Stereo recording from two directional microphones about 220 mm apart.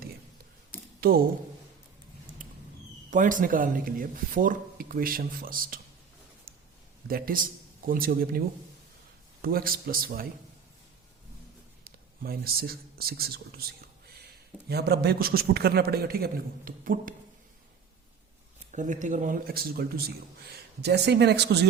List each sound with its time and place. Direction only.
1.0 s a man's voice: 45° right (ahead or behind)
3.1 s speech: 35° right (ahead or behind)
7.1 s speech: 40° right (ahead or behind)
11.9 s a man's voice: 45° right (ahead or behind)
14.7 s a man's voice: 45° right (ahead or behind)
18.7 s a man's voice: 35° right (ahead or behind)